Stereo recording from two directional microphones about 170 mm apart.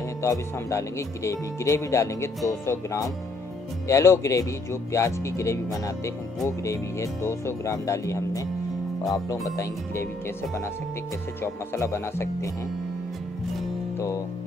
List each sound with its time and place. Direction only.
0.2 s speech: 15° left (ahead or behind)
11.4 s speech: 15° left (ahead or behind)
13.9 s music: 20° left (ahead or behind)